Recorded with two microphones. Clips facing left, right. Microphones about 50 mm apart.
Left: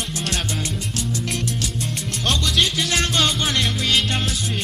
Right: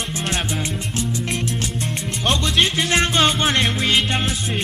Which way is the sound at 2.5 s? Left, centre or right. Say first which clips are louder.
Right 4 dB; right.